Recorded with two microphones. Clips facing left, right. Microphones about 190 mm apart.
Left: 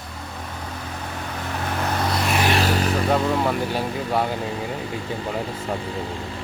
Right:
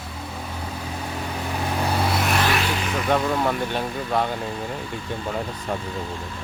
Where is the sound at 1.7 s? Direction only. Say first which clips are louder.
Right 1 dB; 10° right (ahead or behind).